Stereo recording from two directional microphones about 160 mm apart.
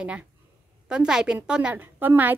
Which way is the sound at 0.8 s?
5° right (ahead or behind).